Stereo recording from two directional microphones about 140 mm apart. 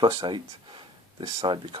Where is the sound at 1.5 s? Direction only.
40° right (ahead or behind).